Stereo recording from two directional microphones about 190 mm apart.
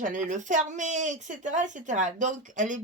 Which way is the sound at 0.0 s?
40° right (ahead or behind).